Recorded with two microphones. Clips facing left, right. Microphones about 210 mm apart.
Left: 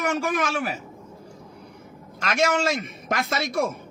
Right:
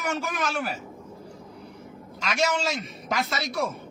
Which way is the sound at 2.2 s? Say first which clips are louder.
Left 3 dB; 55° left (ahead or behind).